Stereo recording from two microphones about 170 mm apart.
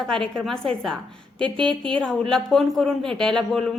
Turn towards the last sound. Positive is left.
turn(degrees=5)  # may be behind; listen again after turning